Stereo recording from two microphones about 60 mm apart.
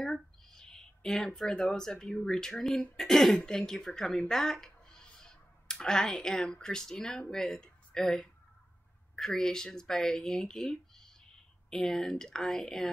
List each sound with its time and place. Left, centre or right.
0.0 s speech: centre